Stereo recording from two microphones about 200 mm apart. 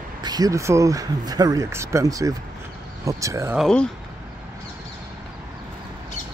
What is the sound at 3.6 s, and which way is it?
Speech, 5° left (ahead or behind).